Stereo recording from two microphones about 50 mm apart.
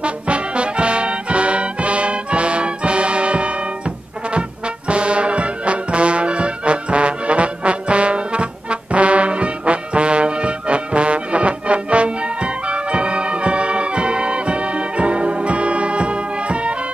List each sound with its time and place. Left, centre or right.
0.0 s music: right
4.3 s brass instrument: right